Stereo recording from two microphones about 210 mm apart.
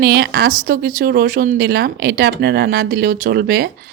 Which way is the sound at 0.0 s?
50° right (ahead or behind).